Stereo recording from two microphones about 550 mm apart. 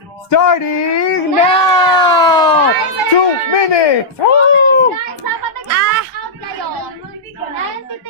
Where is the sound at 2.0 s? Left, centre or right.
Centre.